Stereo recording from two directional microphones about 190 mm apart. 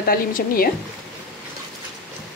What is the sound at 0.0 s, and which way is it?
Speech, 50° left (ahead or behind).